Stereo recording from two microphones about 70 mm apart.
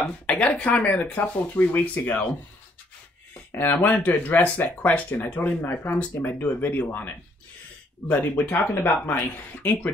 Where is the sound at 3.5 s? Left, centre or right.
Left.